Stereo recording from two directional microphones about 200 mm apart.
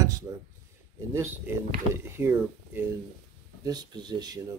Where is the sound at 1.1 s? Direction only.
15° right (ahead or behind).